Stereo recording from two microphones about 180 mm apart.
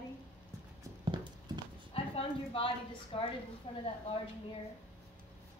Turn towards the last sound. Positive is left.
turn(degrees=30)  # may be behind; listen again after turning